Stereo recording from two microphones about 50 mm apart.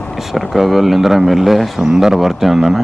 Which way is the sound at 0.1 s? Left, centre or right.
Centre.